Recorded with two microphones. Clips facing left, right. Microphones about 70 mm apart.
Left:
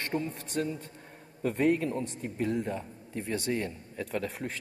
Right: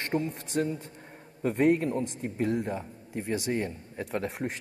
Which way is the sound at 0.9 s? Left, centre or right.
Right.